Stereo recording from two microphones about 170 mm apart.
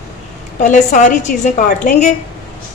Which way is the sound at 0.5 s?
45° left (ahead or behind).